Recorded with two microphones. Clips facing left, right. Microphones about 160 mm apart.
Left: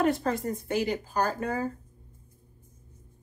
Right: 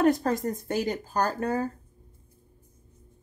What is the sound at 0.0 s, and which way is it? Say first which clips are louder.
A woman's voice: right 3 dB; 40° right (ahead or behind).